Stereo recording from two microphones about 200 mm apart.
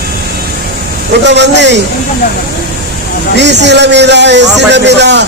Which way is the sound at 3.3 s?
60° right (ahead or behind).